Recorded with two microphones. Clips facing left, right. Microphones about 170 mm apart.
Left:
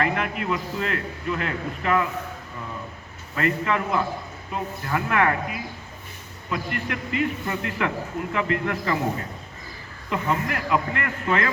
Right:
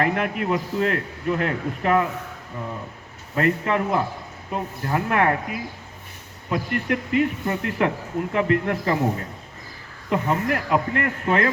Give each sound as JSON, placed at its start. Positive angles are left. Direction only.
{"t": 0.0, "sound": "speech", "side_deg": -45}
{"t": 3.3, "sound": "speech", "side_deg": -45}
{"t": 10.1, "sound": "speech", "side_deg": -45}